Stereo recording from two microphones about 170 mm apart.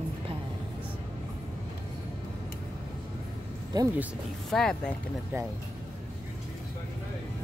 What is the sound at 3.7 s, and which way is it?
Speech, 20° right (ahead or behind).